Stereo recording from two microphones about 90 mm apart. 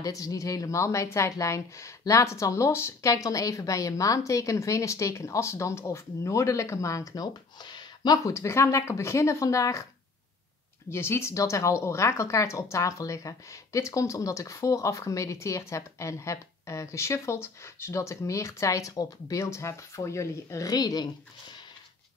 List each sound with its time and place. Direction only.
0.0 s speech: 40° left (ahead or behind)
7.6 s a sound: 55° left (ahead or behind)
8.3 s speech: 30° left (ahead or behind)
10.9 s speech: 30° left (ahead or behind); by 21.1 s 45° left (ahead or behind)